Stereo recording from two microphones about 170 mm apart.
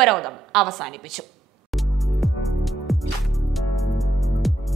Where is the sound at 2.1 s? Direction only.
Centre (ahead or behind).